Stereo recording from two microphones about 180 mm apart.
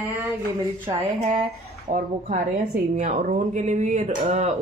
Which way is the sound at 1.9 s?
45° right (ahead or behind).